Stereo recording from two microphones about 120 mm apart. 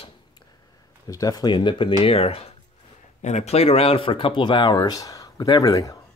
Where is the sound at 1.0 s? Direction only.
30° left (ahead or behind); by 2.5 s 55° left (ahead or behind).